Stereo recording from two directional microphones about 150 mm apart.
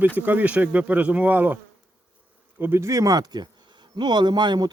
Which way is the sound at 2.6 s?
15° right (ahead or behind).